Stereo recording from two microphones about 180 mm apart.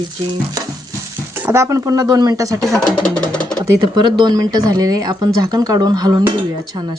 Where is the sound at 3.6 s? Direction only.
25° right (ahead or behind).